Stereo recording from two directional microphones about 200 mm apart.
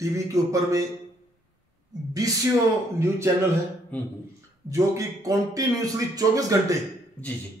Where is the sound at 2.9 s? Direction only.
15° right (ahead or behind).